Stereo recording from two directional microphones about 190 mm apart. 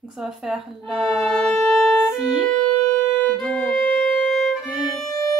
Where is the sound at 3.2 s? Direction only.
Centre (ahead or behind).